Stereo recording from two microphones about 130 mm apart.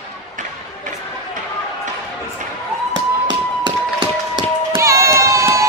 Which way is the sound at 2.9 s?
35° right (ahead or behind).